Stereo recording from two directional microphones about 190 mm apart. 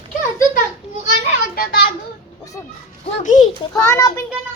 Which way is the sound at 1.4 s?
50° left (ahead or behind).